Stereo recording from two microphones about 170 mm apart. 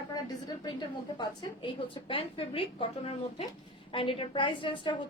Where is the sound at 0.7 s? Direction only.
25° left (ahead or behind).